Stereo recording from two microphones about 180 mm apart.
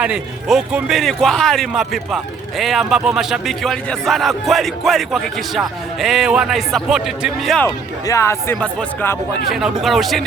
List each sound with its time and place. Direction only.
0.0 s speech: 5° right (ahead or behind)
7.6 s speech: 15° left (ahead or behind)
9.5 s speech: centre (ahead or behind)